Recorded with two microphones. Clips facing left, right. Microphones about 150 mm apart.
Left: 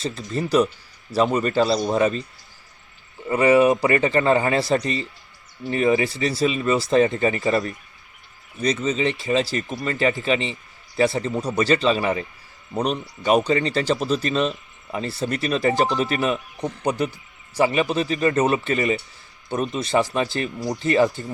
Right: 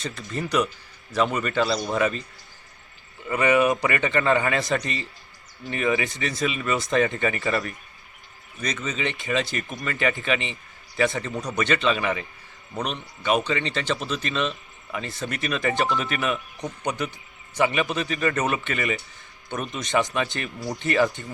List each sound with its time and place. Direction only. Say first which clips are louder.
0.0 s a man's voice: left 4 dB; 30° left (ahead or behind)
3.2 s a man's voice: left 4 dB; 30° left (ahead or behind)